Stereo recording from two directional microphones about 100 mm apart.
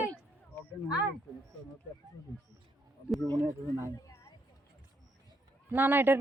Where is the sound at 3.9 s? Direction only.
35° left (ahead or behind).